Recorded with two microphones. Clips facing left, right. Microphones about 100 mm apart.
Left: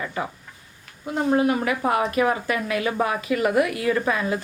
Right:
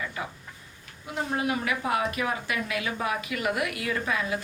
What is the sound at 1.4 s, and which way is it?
A woman's voice, 45° left (ahead or behind).